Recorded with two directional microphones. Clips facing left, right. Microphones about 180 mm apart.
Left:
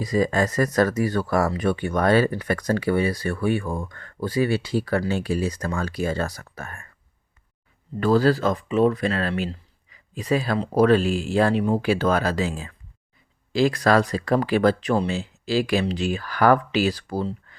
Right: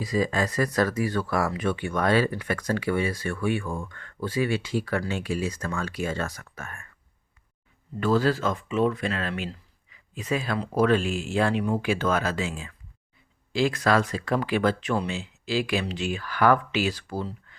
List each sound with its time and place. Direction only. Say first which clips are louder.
0.0 s speech: left 4 dB; 40° left (ahead or behind)
7.9 s speech: left 4 dB; 40° left (ahead or behind)